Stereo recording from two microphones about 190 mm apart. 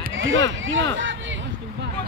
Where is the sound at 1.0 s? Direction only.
75° right (ahead or behind).